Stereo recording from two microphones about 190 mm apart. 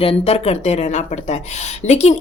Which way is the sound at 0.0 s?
30° left (ahead or behind).